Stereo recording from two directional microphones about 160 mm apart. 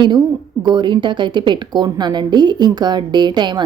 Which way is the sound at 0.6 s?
30° right (ahead or behind).